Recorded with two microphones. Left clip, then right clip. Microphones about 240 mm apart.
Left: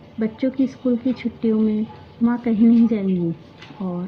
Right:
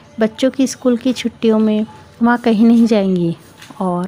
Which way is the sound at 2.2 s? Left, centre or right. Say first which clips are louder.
Right 6 dB; right.